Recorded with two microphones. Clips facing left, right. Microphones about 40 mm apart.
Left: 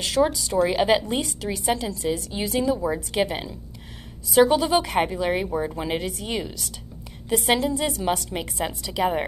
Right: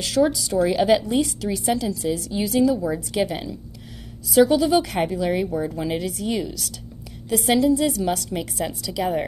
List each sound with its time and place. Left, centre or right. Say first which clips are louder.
0.0 s a woman's voice: right 1 dB; centre